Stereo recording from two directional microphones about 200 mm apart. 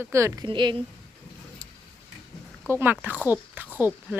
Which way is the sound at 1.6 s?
20° right (ahead or behind).